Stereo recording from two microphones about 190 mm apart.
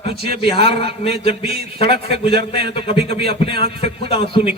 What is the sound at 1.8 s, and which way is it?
Speech, 55° right (ahead or behind).